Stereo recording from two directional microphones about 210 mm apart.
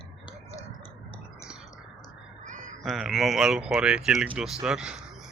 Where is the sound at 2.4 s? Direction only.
35° right (ahead or behind).